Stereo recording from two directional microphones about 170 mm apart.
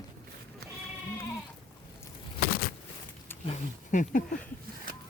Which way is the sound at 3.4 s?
45° left (ahead or behind).